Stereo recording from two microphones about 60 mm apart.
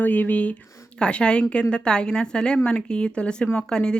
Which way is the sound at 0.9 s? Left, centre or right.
Centre.